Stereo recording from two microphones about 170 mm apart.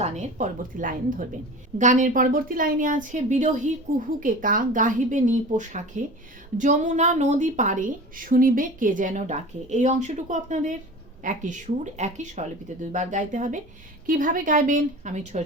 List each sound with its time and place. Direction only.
0.0 s a woman's voice: 40° right (ahead or behind)